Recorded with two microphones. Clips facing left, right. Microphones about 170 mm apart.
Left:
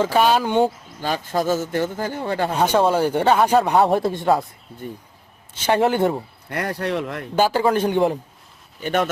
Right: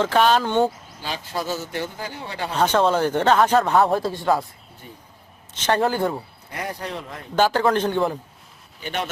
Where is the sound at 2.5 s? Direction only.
10° left (ahead or behind).